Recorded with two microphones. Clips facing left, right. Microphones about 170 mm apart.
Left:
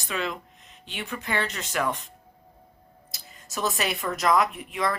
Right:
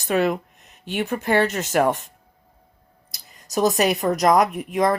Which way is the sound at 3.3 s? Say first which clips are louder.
Right 9 dB; 40° right (ahead or behind).